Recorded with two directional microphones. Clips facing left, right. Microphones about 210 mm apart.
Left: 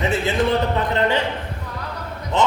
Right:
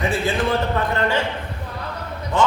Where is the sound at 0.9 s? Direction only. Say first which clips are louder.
Left 3 dB; 20° left (ahead or behind).